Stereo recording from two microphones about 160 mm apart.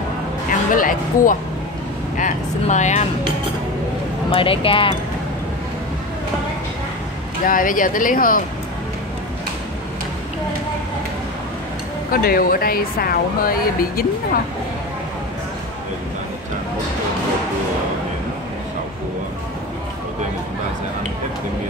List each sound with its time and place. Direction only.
0.7 s a woman's voice: 60° left (ahead or behind)
4.3 s speech: 35° left (ahead or behind)
7.4 s a woman's voice: 60° left (ahead or behind)
12.1 s a woman's voice: 65° left (ahead or behind)